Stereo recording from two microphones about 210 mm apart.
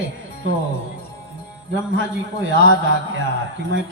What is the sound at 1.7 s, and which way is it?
Speech, 65° right (ahead or behind).